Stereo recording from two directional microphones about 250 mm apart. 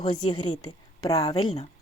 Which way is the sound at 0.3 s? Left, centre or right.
Centre.